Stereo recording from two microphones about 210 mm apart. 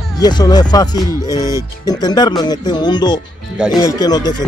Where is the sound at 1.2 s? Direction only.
15° left (ahead or behind).